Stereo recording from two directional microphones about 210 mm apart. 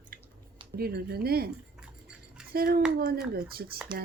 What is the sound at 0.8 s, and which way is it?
Speech, 50° right (ahead or behind).